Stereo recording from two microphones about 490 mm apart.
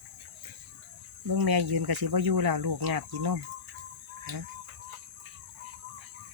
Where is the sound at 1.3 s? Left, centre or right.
Right.